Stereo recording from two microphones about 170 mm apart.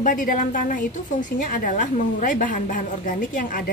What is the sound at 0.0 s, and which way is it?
A woman's voice, 55° left (ahead or behind).